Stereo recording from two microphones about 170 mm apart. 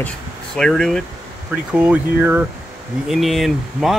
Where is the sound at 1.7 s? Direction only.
10° right (ahead or behind).